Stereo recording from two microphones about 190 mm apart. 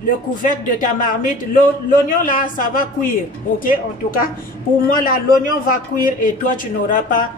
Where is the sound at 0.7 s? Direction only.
45° left (ahead or behind).